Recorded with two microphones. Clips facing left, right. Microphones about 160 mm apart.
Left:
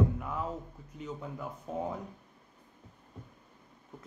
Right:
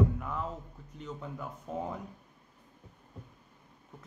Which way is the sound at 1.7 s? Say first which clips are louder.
Left 1 dB; centre (ahead or behind).